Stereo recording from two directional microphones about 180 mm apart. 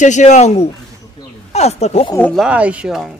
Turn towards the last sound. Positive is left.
turn(degrees=-5)  # may be behind; listen again after turning